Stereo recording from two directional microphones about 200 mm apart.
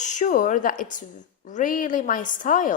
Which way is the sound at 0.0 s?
40° left (ahead or behind).